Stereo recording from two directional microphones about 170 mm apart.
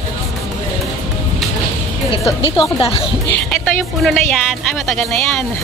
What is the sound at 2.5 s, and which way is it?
Speech, 35° left (ahead or behind).